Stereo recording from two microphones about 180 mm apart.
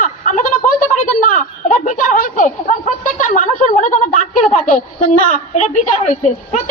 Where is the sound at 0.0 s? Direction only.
45° left (ahead or behind).